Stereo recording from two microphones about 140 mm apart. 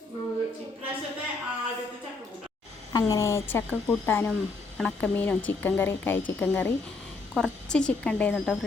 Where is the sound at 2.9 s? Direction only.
25° left (ahead or behind).